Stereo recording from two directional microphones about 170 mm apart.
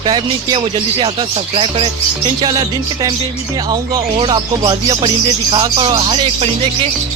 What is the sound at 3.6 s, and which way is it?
Speech, 25° right (ahead or behind).